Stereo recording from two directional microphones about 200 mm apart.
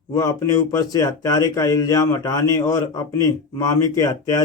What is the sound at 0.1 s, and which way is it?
Speech, 15° left (ahead or behind).